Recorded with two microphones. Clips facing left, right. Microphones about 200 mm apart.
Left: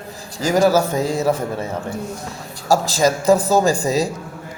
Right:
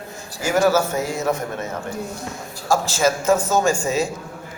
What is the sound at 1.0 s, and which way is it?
A man's voice, 35° left (ahead or behind).